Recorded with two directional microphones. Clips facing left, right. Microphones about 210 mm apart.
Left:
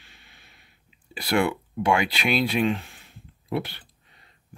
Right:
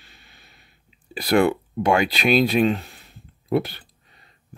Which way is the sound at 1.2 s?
40° right (ahead or behind).